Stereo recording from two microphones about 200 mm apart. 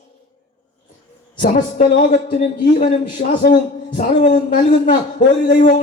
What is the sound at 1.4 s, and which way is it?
A man's voice, 35° left (ahead or behind).